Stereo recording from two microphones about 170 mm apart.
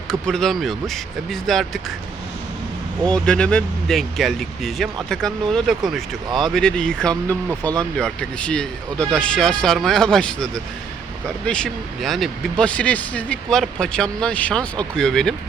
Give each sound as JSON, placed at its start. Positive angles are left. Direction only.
{"t": 0.1, "sound": "speech", "side_deg": 5}
{"t": 3.0, "sound": "speech", "side_deg": 5}